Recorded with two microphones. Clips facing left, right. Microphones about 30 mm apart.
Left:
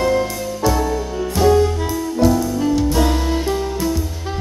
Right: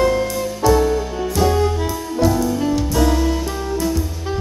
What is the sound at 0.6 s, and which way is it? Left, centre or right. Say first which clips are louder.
Music: right 3 dB; centre.